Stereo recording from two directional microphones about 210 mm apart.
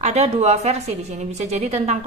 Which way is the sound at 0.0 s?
30° right (ahead or behind).